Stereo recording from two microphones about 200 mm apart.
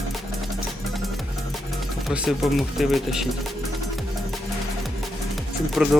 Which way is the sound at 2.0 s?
Centre (ahead or behind).